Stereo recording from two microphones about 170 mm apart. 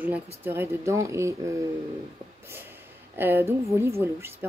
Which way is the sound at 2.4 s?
15° right (ahead or behind).